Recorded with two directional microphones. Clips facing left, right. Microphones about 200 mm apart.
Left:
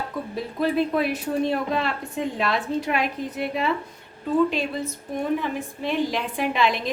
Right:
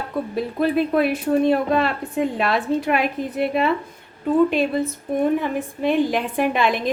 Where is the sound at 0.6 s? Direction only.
55° right (ahead or behind).